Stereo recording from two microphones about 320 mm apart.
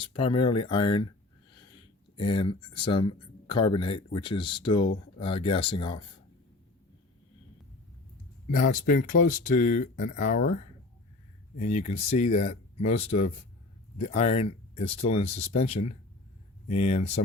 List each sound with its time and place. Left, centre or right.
0.0 s speech: centre
2.1 s speech: centre
8.4 s speech: left